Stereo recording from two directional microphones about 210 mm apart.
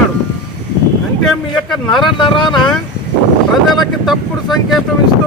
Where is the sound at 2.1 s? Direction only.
25° left (ahead or behind).